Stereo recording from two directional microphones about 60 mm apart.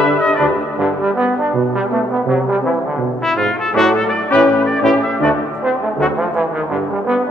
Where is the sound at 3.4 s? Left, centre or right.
Centre.